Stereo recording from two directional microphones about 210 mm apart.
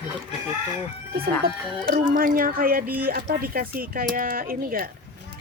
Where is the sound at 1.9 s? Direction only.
40° right (ahead or behind).